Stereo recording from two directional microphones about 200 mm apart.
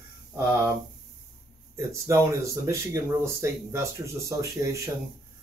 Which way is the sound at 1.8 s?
15° right (ahead or behind).